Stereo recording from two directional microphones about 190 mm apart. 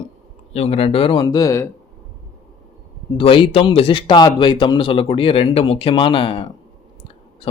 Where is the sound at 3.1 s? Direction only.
25° left (ahead or behind).